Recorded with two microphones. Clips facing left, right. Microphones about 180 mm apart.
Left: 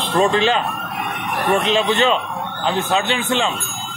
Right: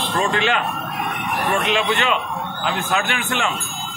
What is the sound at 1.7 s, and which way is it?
A man's voice, 30° left (ahead or behind).